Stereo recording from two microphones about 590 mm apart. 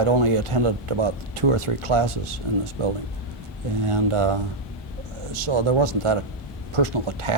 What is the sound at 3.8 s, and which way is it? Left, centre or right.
Speech, right.